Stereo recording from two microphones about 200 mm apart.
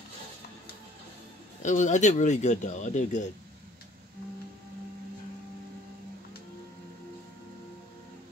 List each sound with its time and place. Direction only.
1.6 s speech: 40° left (ahead or behind)